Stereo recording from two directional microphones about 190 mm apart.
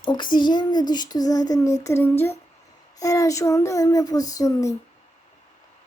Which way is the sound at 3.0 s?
15° left (ahead or behind).